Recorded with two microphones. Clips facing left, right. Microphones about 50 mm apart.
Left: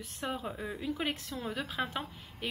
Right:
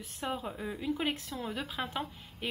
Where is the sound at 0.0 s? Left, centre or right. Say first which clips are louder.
Right 1 dB; centre.